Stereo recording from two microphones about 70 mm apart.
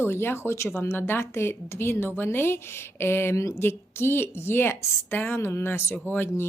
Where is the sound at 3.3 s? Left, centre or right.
Left.